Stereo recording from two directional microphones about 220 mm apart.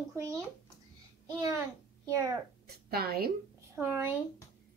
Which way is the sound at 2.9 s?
45° right (ahead or behind).